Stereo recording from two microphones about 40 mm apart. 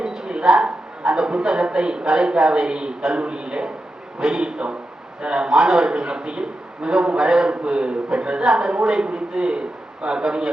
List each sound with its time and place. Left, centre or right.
0.0 s a woman's voice: centre